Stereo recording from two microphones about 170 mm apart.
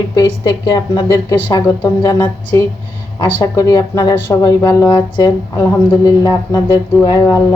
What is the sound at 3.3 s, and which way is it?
Speech, 20° left (ahead or behind).